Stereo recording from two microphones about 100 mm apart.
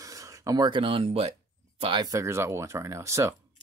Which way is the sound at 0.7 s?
60° right (ahead or behind).